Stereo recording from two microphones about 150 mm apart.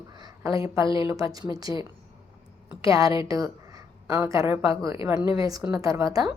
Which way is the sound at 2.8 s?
20° right (ahead or behind).